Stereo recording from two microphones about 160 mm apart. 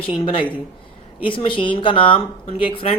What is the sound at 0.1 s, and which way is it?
Speech, 35° left (ahead or behind).